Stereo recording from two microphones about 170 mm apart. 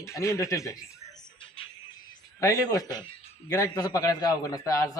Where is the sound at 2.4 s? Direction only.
20° left (ahead or behind).